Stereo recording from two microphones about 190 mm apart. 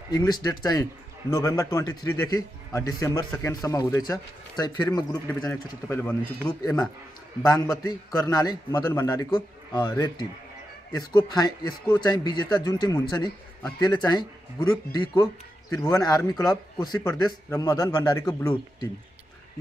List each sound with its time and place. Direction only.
0.1 s a man's voice: 20° left (ahead or behind)
7.4 s a man's voice: 20° left (ahead or behind)